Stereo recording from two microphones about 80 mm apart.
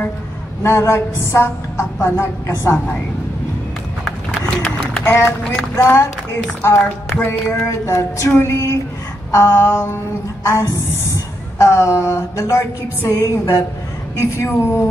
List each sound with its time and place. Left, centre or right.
0.6 s a woman's voice: left
4.6 s run: centre
5.0 s a woman's voice: left
6.8 s music: centre
7.2 s a woman's voice: left